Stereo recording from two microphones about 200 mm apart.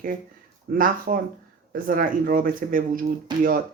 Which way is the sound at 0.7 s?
45° right (ahead or behind).